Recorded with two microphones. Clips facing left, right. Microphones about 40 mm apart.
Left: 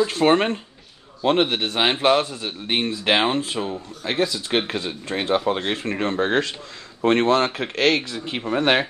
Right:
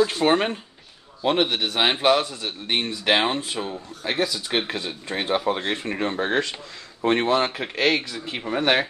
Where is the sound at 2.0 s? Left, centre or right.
Left.